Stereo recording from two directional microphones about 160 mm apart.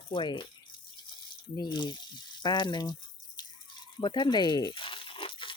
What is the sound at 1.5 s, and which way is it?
Speech, 30° left (ahead or behind).